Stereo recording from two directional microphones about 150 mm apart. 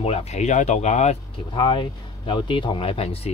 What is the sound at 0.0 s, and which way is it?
Speech, 45° left (ahead or behind).